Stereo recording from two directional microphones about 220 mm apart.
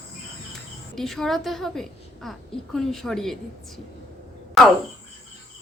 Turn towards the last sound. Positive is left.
turn(degrees=0)  # may be behind; listen again after turning